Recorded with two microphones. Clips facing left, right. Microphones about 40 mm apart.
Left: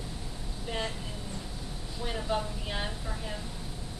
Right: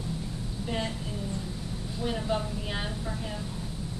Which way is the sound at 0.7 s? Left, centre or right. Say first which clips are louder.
Right 2 dB; centre.